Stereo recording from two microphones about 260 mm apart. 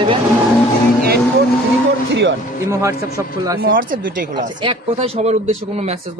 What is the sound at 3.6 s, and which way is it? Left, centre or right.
Speech, right.